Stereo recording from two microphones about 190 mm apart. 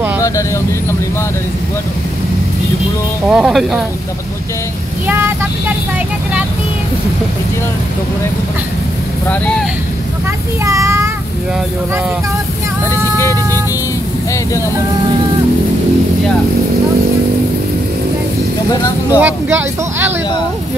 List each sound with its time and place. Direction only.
3.3 s speech: 5° right (ahead or behind)
5.0 s vehicle: 10° right (ahead or behind)
10.6 s a child's voice: 15° right (ahead or behind)
19.0 s speech: 10° right (ahead or behind)